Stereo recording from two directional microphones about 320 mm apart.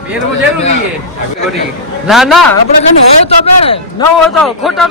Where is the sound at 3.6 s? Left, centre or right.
Centre.